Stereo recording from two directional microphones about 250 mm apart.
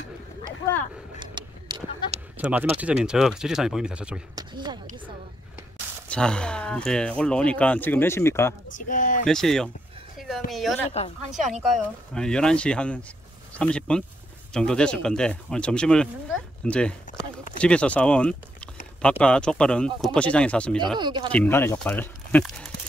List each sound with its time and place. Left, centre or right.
1.2 s a sound: centre
2.3 s speech: centre
4.4 s speech: centre
6.0 s speech: centre
8.7 s speech: left
9.2 s speech: centre
10.1 s a sound: centre
10.5 s speech: centre
21.0 s speech: centre
21.3 s speech: centre